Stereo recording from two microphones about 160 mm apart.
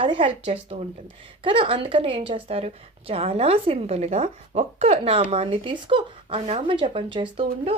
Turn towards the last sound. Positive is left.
turn(degrees=-35)  # may be behind; listen again after turning